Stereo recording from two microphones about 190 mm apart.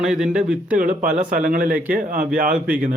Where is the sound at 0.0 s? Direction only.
5° right (ahead or behind).